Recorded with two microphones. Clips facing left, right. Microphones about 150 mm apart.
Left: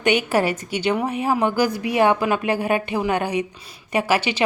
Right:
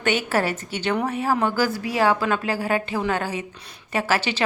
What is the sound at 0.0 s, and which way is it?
A woman's voice, 15° left (ahead or behind).